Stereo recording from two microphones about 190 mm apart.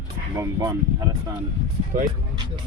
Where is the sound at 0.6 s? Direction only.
15° right (ahead or behind).